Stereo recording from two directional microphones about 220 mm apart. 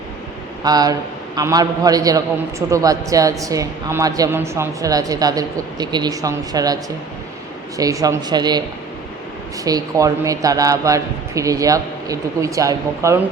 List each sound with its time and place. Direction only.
0.6 s a man's voice: 15° right (ahead or behind)
7.8 s a man's voice: 15° right (ahead or behind)
9.6 s a man's voice: 15° right (ahead or behind)